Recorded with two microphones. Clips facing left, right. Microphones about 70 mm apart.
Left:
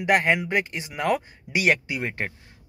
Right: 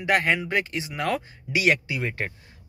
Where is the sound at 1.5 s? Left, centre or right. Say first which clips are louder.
Even; left.